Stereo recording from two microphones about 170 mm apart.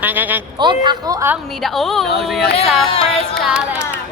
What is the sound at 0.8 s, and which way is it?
Speech, 20° right (ahead or behind).